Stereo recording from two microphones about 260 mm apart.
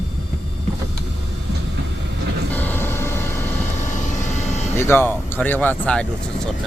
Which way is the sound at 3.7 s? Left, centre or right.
Left.